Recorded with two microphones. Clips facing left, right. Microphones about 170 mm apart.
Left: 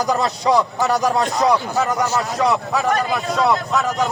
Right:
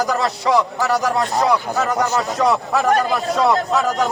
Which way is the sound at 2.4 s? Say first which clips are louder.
Right 1 dB; 5° left (ahead or behind).